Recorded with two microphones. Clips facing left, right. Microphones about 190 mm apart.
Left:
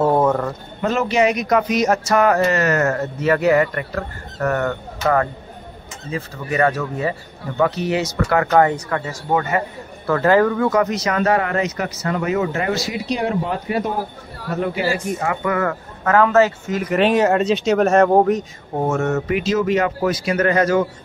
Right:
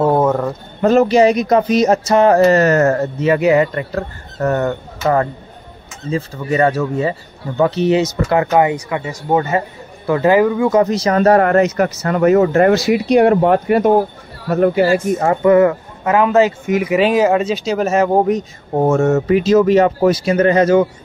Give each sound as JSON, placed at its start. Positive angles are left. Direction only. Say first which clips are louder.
{"t": 0.0, "sound": "a sound", "louder": "right 2 dB", "side_deg": -5}
{"t": 0.8, "sound": "speech", "louder": "right 7 dB", "side_deg": -35}
{"t": 3.2, "sound": "a man's voice", "louder": "right 2 dB", "side_deg": -20}
{"t": 10.7, "sound": "speech", "louder": "right 5 dB", "side_deg": -30}
{"t": 15.4, "sound": "speech", "louder": "right 10 dB", "side_deg": -20}
{"t": 18.8, "sound": "speech", "louder": "right 6 dB", "side_deg": -30}